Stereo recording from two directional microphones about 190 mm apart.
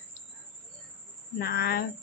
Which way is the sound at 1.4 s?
55° left (ahead or behind).